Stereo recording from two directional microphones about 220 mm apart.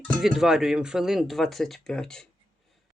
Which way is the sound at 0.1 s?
Centre (ahead or behind).